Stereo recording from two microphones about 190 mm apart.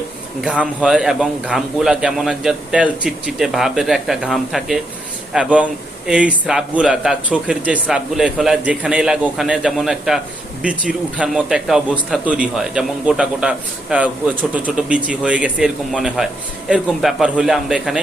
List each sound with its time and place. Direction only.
0.4 s a man's voice: 5° right (ahead or behind)